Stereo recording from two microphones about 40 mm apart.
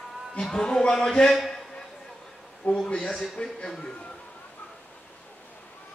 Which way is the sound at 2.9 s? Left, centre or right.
Left.